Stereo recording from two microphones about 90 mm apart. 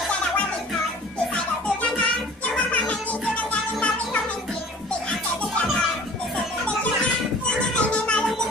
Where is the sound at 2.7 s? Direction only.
15° left (ahead or behind).